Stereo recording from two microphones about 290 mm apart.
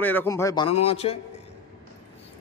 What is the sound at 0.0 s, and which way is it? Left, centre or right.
A man's voice, centre.